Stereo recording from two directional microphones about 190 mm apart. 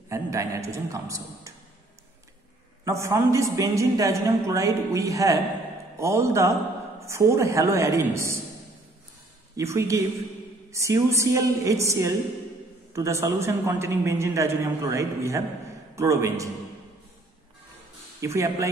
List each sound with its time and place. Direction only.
0.1 s a man's voice: 15° right (ahead or behind)
2.8 s a man's voice: 15° right (ahead or behind)
9.6 s a man's voice: 15° right (ahead or behind)
18.2 s a man's voice: 15° right (ahead or behind)